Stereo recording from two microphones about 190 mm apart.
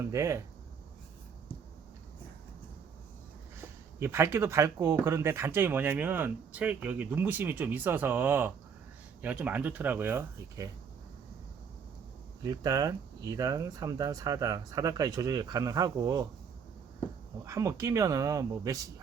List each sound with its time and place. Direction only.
0.0 s speech: 15° right (ahead or behind)
3.6 s speech: 15° right (ahead or behind)
12.4 s speech: 20° right (ahead or behind)
17.4 s speech: 15° right (ahead or behind)